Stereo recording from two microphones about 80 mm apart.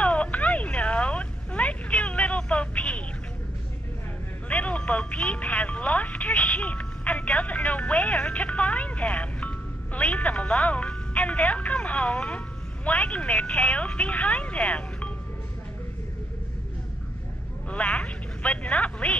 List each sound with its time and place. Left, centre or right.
0.0 s a sound: centre
4.5 s telephone: centre
17.6 s telephone: centre